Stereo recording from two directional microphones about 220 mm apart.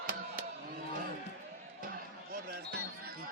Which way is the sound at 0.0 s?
40° right (ahead or behind).